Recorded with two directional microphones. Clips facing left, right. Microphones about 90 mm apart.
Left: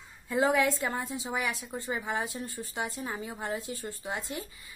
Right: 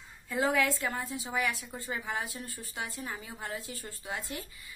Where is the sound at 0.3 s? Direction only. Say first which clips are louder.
Left 3 dB; 20° left (ahead or behind).